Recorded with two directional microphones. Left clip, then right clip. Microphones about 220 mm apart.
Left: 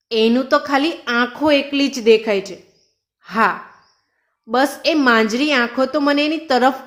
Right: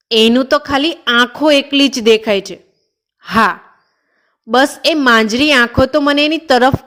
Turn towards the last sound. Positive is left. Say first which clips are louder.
# right 5 dB
turn(degrees=-35)  # may be behind; listen again after turning